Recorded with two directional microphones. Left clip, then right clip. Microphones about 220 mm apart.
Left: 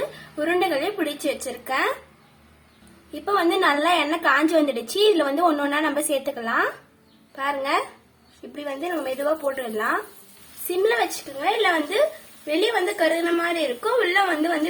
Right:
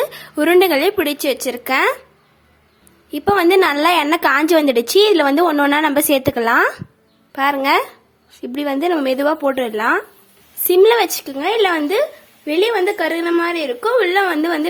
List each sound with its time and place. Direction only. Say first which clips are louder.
0.3 s a woman's voice: right 9 dB; 50° right (ahead or behind)
3.1 s a woman's voice: right 8 dB; 50° right (ahead or behind)
10.8 s a woman's voice: right 8 dB; 55° right (ahead or behind)